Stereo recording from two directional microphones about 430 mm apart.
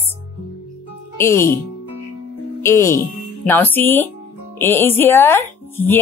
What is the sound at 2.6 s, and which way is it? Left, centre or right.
Speech, centre.